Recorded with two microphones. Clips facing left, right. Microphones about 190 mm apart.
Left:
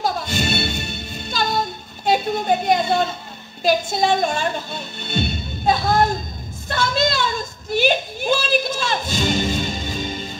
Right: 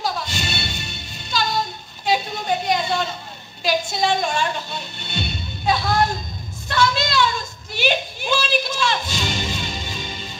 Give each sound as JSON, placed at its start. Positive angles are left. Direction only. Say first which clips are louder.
{"t": 0.0, "sound": "music", "louder": "left 4 dB", "side_deg": 50}
{"t": 3.6, "sound": "speech", "louder": "left 3 dB", "side_deg": 50}
{"t": 6.7, "sound": "a sound", "louder": "even", "side_deg": 50}
{"t": 8.2, "sound": "music", "louder": "left 3 dB", "side_deg": 50}